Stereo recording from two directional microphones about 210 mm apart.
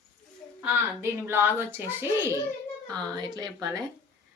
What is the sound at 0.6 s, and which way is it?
A woman's voice, 10° right (ahead or behind).